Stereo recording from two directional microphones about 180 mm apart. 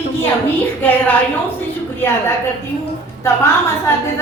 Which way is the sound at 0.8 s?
10° left (ahead or behind).